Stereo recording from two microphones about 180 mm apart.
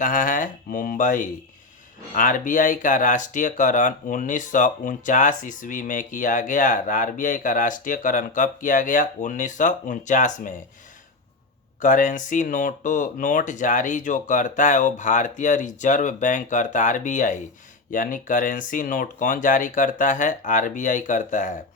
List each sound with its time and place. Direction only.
0.0 s speech: 45° left (ahead or behind)
11.8 s speech: 45° left (ahead or behind)